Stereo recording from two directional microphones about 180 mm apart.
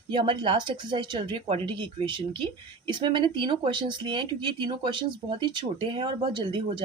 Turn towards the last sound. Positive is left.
turn(degrees=-25)  # may be behind; listen again after turning